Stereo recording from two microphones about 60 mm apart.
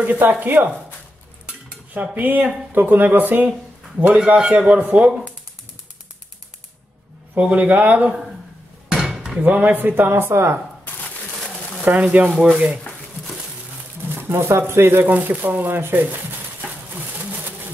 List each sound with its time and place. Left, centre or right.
0.0 s speech: right
2.0 s speech: right
7.3 s speech: right
8.8 s dishes: centre
9.4 s speech: right
11.8 s speech: right
14.0 s a sound: right
14.6 s speech: right